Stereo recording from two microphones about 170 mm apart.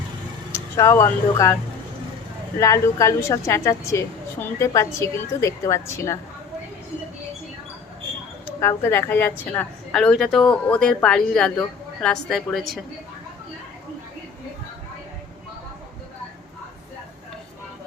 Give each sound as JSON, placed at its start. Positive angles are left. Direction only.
{"t": 0.5, "sound": "speech", "side_deg": 15}
{"t": 2.6, "sound": "a woman's voice", "side_deg": 15}
{"t": 8.6, "sound": "a woman's voice", "side_deg": 15}